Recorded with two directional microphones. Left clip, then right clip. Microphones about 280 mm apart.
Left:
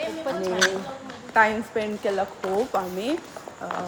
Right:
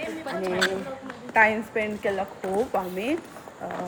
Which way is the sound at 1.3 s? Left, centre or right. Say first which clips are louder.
Even; centre.